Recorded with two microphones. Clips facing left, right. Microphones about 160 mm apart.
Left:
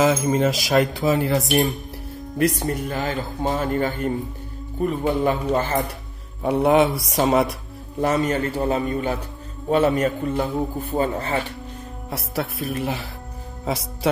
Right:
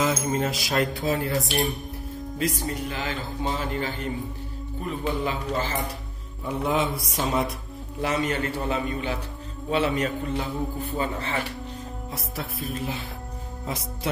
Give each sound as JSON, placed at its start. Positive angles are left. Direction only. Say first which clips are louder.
{"t": 0.0, "sound": "speech", "louder": "left 6 dB", "side_deg": 90}
{"t": 2.3, "sound": "speech", "louder": "left 7 dB", "side_deg": 60}
{"t": 6.4, "sound": "speech", "louder": "left 8 dB", "side_deg": 70}
{"t": 8.0, "sound": "speech", "louder": "left 5 dB", "side_deg": 45}
{"t": 12.1, "sound": "speech", "louder": "left 9 dB", "side_deg": 75}